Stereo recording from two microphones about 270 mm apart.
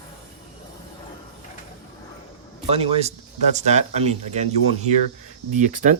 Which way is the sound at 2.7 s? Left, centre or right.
Right.